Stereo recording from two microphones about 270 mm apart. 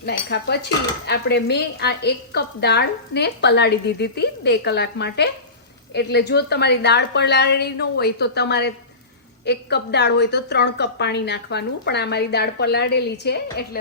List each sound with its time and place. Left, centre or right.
0.0 s a woman's voice: left